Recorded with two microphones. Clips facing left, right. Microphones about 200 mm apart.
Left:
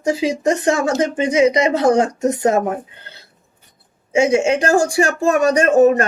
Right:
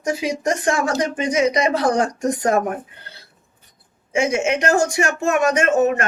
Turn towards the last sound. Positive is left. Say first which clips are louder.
# left 5 dB
turn(degrees=35)  # may be behind; listen again after turning